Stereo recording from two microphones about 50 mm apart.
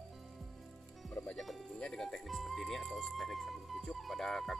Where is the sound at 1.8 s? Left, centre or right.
Centre.